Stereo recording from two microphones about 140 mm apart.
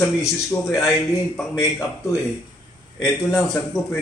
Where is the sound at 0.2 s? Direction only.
20° left (ahead or behind).